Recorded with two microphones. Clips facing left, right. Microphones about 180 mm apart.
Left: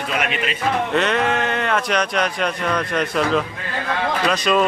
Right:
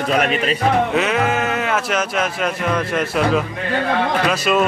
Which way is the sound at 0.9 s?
5° right (ahead or behind).